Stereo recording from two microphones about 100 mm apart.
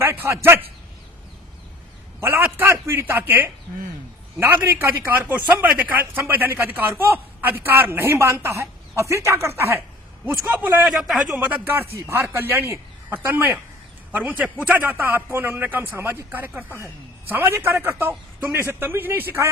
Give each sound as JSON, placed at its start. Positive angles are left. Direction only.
{"t": 0.0, "sound": "speech", "side_deg": -25}
{"t": 2.2, "sound": "speech", "side_deg": -20}
{"t": 10.8, "sound": "a man's voice", "side_deg": 0}
{"t": 11.3, "sound": "speech", "side_deg": -20}